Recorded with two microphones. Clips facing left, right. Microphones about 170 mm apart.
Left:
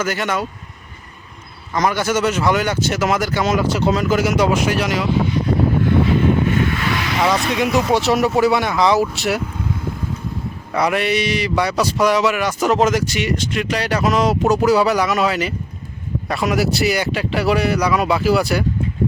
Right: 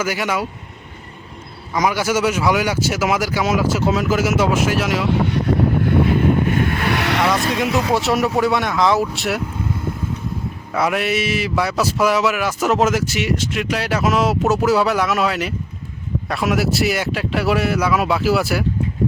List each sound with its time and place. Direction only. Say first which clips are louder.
0.0 s speech: even; 10° right (ahead or behind)
1.7 s a man's voice: even; 10° right (ahead or behind)
5.0 s speech: even; 65° right (ahead or behind)
5.8 s vehicle: even; 55° right (ahead or behind)
7.3 s a man's voice: left 1 dB; centre (ahead or behind)